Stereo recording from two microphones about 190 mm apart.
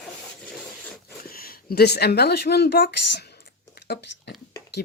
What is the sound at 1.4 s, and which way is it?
Speech, 55° left (ahead or behind).